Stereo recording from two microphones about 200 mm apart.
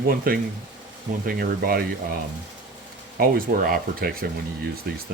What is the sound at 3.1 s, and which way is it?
Speech, 50° right (ahead or behind).